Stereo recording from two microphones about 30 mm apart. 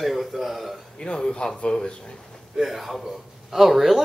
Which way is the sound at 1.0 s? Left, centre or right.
Left.